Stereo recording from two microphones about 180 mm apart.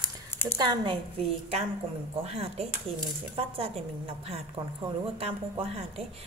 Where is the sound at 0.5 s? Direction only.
25° right (ahead or behind).